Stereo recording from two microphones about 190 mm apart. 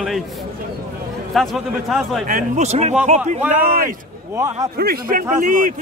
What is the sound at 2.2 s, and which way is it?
Speech, 40° right (ahead or behind).